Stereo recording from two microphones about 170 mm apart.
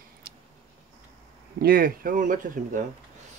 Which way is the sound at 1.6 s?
60° right (ahead or behind).